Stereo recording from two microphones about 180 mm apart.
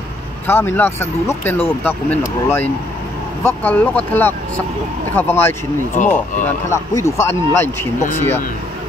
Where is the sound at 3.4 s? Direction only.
10° left (ahead or behind).